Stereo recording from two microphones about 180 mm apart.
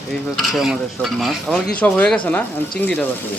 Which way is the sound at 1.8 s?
5° left (ahead or behind).